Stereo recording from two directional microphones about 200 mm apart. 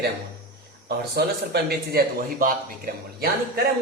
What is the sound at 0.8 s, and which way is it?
Speech, 50° right (ahead or behind).